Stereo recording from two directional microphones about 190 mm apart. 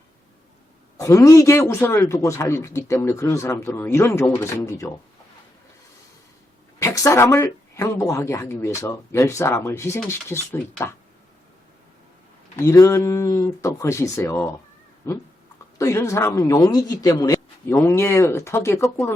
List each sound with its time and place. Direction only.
0.9 s a man's voice: 15° left (ahead or behind)
6.7 s a man's voice: 15° left (ahead or behind)
12.5 s a man's voice: 15° left (ahead or behind)